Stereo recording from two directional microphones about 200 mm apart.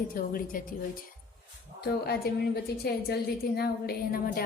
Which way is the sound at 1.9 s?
50° left (ahead or behind).